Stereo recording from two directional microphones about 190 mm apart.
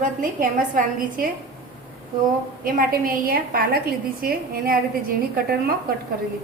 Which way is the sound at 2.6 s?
50° right (ahead or behind).